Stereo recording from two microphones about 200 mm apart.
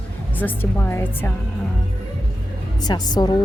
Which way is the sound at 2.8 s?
20° left (ahead or behind).